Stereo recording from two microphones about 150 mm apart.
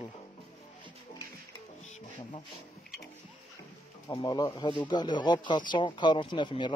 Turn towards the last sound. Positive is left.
turn(degrees=35)  # may be behind; listen again after turning